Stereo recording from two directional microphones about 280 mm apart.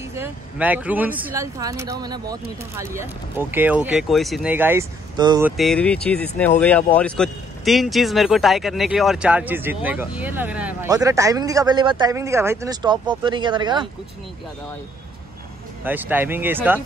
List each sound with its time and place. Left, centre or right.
0.2 s speech: centre
5.6 s speech: centre
15.8 s speech: centre